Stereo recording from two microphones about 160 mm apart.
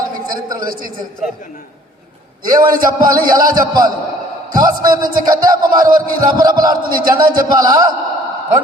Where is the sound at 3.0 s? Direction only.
60° right (ahead or behind).